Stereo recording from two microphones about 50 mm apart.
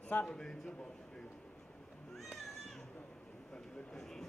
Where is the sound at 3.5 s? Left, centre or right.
Centre.